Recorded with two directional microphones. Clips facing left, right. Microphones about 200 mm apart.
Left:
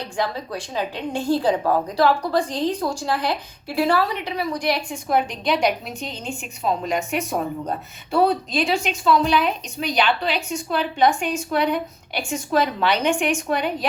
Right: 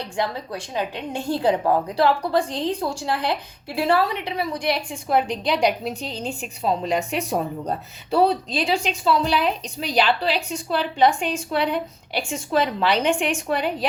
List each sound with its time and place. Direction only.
1.3 s a woman's voice: 25° right (ahead or behind)